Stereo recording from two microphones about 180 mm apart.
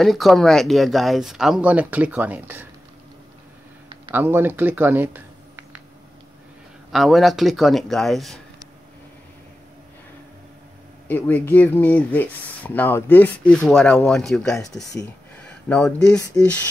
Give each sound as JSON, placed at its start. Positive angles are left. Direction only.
{"t": 0.0, "sound": "speech", "side_deg": 0}
{"t": 4.0, "sound": "speech", "side_deg": -10}
{"t": 6.9, "sound": "speech", "side_deg": 0}
{"t": 11.1, "sound": "speech", "side_deg": 10}
{"t": 14.6, "sound": "speech", "side_deg": 20}
{"t": 15.3, "sound": "a sound", "side_deg": 5}
{"t": 16.3, "sound": "speech", "side_deg": 5}